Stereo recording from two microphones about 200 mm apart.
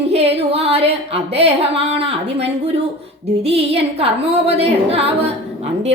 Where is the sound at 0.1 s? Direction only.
30° right (ahead or behind).